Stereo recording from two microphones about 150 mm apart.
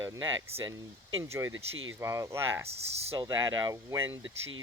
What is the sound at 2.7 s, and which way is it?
Speech, 45° right (ahead or behind).